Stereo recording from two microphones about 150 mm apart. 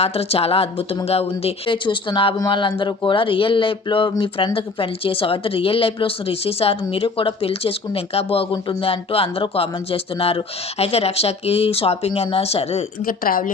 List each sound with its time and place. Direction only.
0.0 s a woman's voice: 40° left (ahead or behind)
13.0 s a woman's voice: 70° left (ahead or behind)